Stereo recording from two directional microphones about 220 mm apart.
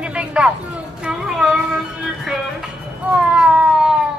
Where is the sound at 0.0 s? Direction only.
5° right (ahead or behind).